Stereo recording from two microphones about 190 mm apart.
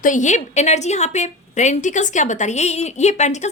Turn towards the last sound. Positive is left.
turn(degrees=35)  # may be behind; listen again after turning